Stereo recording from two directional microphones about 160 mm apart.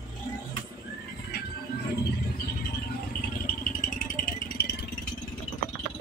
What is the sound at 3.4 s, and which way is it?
Rattle, 60° left (ahead or behind).